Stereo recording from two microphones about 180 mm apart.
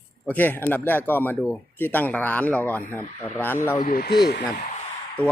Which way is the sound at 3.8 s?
50° left (ahead or behind).